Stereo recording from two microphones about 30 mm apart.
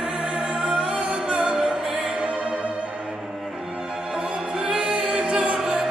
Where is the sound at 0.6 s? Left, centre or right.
Right.